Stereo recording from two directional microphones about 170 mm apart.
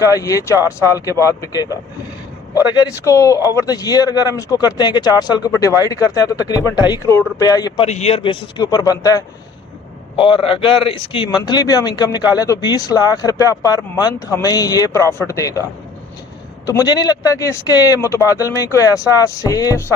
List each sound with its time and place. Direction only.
0.0 s speech: 20° left (ahead or behind)
7.9 s speech: 40° left (ahead or behind); by 15.6 s 20° left (ahead or behind)
16.6 s speech: 20° left (ahead or behind)